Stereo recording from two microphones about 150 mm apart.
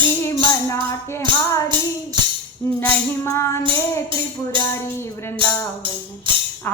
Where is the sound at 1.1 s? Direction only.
20° left (ahead or behind).